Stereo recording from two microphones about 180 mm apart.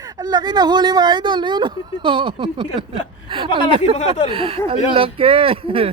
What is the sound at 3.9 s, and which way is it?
Speech, 35° left (ahead or behind).